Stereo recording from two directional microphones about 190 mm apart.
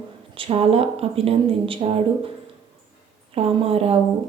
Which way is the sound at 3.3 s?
30° right (ahead or behind).